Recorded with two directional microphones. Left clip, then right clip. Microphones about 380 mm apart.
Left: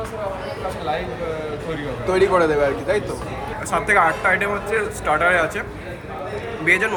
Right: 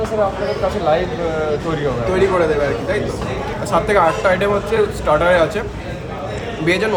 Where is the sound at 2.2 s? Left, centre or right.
Left.